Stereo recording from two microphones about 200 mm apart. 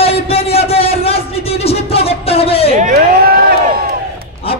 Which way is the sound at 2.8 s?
45° right (ahead or behind).